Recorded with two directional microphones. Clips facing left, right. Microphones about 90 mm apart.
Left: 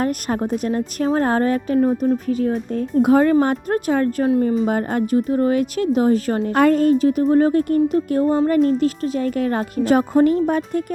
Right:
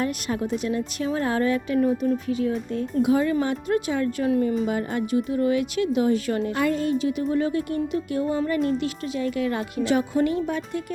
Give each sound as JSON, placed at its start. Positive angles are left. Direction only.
{"t": 0.0, "sound": "speech", "side_deg": 45}